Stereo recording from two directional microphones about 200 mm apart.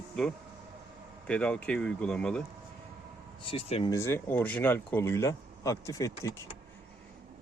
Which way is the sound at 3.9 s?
15° left (ahead or behind).